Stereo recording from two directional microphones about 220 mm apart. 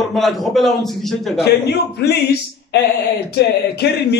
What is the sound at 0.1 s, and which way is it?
Speech, centre (ahead or behind).